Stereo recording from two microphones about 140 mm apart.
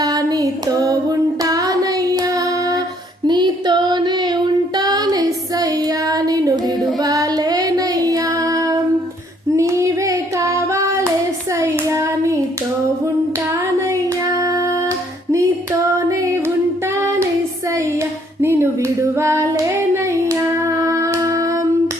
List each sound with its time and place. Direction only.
0.0 s music: 25° right (ahead or behind)
1.5 s child singing: 25° right (ahead or behind)
7.0 s music: 25° right (ahead or behind)
9.6 s female singing: 20° right (ahead or behind)
11.6 s hands: 20° right (ahead or behind)
14.3 s a sound: 25° right (ahead or behind)
16.0 s music: 20° right (ahead or behind)
18.3 s female singing: 15° right (ahead or behind)